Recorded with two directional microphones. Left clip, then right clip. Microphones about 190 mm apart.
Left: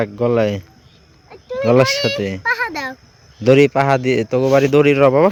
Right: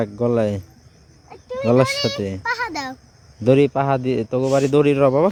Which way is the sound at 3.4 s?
Centre (ahead or behind).